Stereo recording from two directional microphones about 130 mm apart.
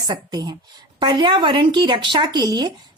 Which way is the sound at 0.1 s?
30° right (ahead or behind).